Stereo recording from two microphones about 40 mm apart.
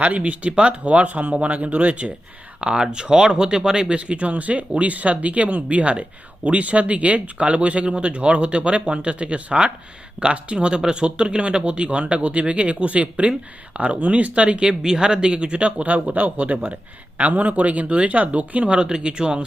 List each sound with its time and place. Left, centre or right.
0.0 s speech: right
2.8 s speech: centre
14.8 s speech: centre